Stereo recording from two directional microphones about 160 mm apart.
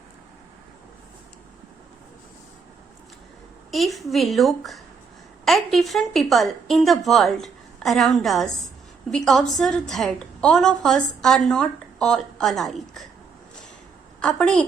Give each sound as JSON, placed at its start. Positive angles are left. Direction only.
{"t": 3.7, "sound": "a woman's voice", "side_deg": 0}
{"t": 14.2, "sound": "a woman's voice", "side_deg": 5}